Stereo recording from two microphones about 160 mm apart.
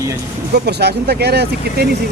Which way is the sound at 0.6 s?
90° right.